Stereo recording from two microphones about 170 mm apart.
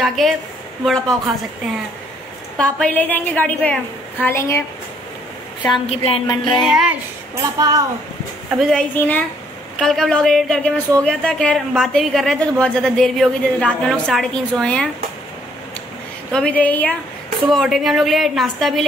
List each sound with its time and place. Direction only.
0.0 s a woman's voice: centre (ahead or behind)
2.5 s a woman's voice: 5° left (ahead or behind)
5.7 s a woman's voice: 35° left (ahead or behind)
6.2 s music: 25° left (ahead or behind)
6.6 s a woman's voice: 5° right (ahead or behind)
7.5 s speech: 20° right (ahead or behind)
8.5 s a woman's voice: centre (ahead or behind)
16.3 s a woman's voice: 5° left (ahead or behind)